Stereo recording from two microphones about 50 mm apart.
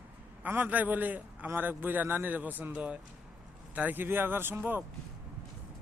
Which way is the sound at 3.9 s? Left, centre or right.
Right.